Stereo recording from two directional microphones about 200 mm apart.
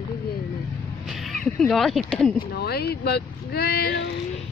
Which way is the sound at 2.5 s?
50° left (ahead or behind).